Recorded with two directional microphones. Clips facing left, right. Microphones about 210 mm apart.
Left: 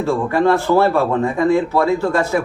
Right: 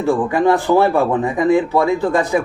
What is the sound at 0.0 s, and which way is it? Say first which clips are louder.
Speech: right 1 dB; 15° right (ahead or behind).